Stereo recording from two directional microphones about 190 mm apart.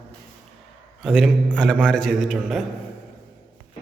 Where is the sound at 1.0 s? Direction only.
Centre (ahead or behind).